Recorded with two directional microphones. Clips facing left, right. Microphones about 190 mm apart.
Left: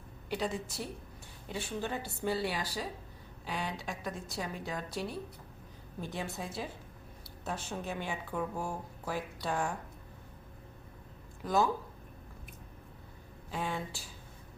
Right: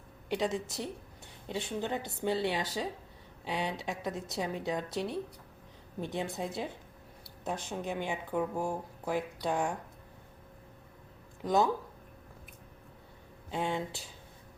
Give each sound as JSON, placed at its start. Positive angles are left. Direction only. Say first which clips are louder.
{"t": 0.3, "sound": "a woman's voice", "louder": "right 3 dB", "side_deg": -20}
{"t": 11.4, "sound": "a woman's voice", "louder": "right 2 dB", "side_deg": -20}
{"t": 13.5, "sound": "a woman's voice", "louder": "right 3 dB", "side_deg": -25}